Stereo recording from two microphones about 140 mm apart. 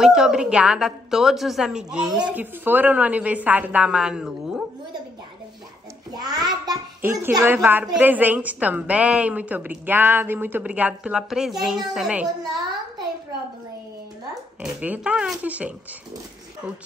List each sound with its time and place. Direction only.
0.0 s a woman's voice: 5° right (ahead or behind)
6.1 s a child's voice: 30° right (ahead or behind)
7.0 s a woman's voice: 15° right (ahead or behind)
14.6 s a woman's voice: 5° right (ahead or behind)